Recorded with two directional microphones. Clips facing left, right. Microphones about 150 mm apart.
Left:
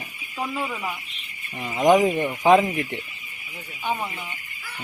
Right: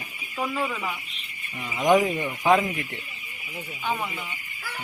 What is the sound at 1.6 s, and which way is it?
Speech, 20° left (ahead or behind).